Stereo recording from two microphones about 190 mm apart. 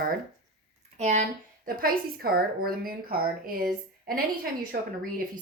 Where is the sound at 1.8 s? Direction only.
50° right (ahead or behind).